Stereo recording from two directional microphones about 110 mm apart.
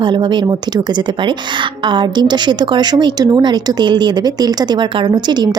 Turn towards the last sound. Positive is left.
turn(degrees=-40)  # may be behind; listen again after turning